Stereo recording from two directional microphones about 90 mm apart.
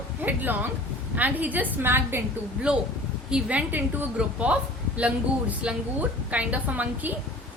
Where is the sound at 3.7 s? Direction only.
20° right (ahead or behind).